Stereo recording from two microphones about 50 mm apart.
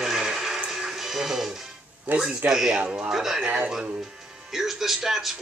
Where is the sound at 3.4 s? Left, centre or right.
Right.